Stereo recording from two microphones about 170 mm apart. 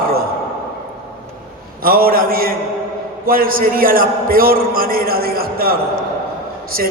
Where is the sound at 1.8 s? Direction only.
60° right (ahead or behind).